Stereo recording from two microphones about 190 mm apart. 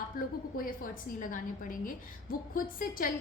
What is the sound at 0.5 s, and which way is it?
A woman's voice, 50° left (ahead or behind).